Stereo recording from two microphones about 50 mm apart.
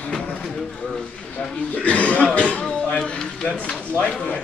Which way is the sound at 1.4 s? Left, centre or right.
Left.